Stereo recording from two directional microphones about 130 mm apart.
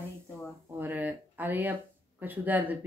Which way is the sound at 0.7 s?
15° right (ahead or behind).